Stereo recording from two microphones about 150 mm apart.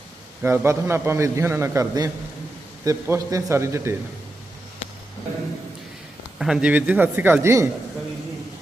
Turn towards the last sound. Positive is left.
turn(degrees=-20)  # may be behind; listen again after turning